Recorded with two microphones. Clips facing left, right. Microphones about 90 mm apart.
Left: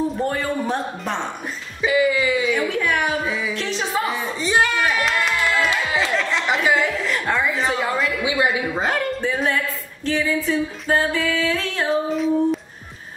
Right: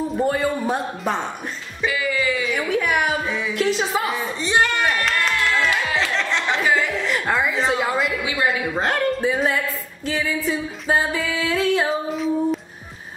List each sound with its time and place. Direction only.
0.1 s speech: 5° right (ahead or behind)
1.9 s music: 20° left (ahead or behind)
2.7 s a sound: 10° right (ahead or behind)
3.3 s music: centre (ahead or behind)
3.5 s a sound: 10° right (ahead or behind)
8.2 s a man's voice: 20° left (ahead or behind)
8.7 s speech: centre (ahead or behind)
10.0 s music: 5° right (ahead or behind)